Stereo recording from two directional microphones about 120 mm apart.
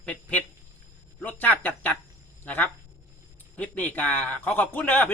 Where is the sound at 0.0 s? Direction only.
10° left (ahead or behind).